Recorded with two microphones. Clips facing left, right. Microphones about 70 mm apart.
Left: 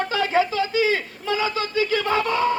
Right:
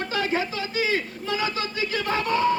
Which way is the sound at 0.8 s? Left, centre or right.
Left.